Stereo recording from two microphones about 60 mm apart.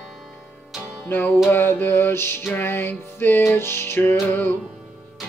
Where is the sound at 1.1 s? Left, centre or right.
Left.